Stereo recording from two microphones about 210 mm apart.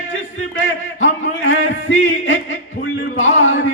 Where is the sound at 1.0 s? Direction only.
65° left (ahead or behind).